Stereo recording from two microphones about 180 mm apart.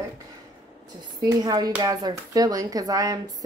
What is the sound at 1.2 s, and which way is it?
Speech, 20° right (ahead or behind).